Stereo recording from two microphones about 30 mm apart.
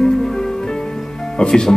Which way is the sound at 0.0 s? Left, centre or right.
Centre.